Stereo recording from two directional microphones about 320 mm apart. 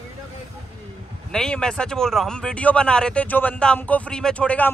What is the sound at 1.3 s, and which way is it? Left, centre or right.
Speech, centre.